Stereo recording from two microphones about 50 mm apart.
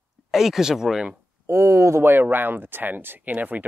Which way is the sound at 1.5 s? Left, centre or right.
Right.